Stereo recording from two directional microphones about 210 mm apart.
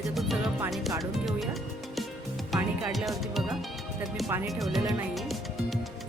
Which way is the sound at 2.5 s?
Centre (ahead or behind).